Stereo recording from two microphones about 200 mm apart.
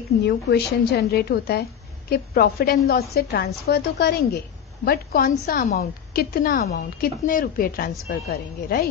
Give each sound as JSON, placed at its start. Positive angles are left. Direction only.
{"t": 0.2, "sound": "a woman's voice", "side_deg": 55}